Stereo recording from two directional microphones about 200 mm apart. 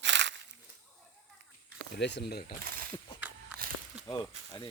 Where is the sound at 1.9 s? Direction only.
60° left (ahead or behind).